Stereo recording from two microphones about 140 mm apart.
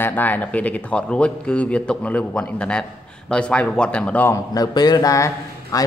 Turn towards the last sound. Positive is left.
turn(degrees=25)  # may be behind; listen again after turning